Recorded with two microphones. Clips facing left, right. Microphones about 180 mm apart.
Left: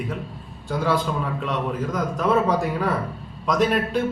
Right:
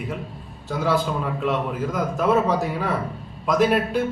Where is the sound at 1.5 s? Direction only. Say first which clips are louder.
Right 3 dB; 5° right (ahead or behind).